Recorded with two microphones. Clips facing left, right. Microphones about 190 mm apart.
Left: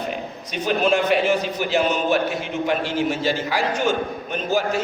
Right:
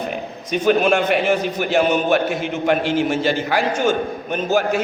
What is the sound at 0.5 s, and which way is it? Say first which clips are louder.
A man's voice: right 4 dB; 55° right (ahead or behind).